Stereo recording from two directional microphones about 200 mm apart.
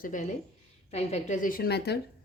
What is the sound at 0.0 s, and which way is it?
A woman's voice, 40° left (ahead or behind).